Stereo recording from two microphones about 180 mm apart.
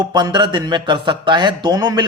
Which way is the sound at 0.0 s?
25° right (ahead or behind).